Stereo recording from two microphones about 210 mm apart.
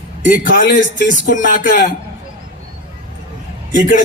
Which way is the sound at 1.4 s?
40° left (ahead or behind).